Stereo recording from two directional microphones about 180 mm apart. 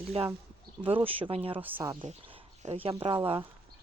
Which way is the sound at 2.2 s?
30° right (ahead or behind).